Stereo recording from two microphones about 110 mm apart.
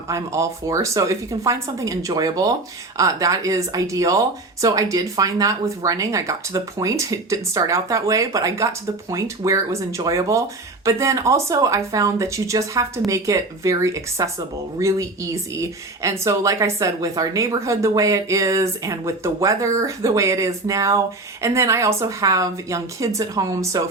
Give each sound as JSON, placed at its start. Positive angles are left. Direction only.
{"t": 0.1, "sound": "speech", "side_deg": -30}